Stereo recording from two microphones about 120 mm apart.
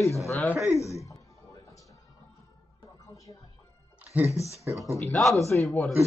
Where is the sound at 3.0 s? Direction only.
25° left (ahead or behind).